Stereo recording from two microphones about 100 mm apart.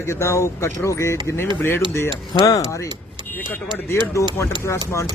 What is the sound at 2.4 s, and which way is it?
Speech, 35° left (ahead or behind).